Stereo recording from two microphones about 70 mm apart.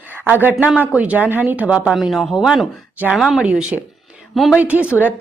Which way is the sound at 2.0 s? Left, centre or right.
Centre.